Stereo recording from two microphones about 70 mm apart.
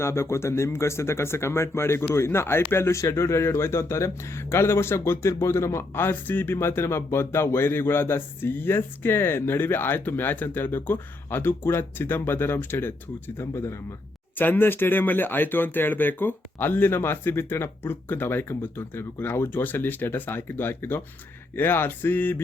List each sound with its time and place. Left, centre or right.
0.0 s speech: left
14.3 s speech: left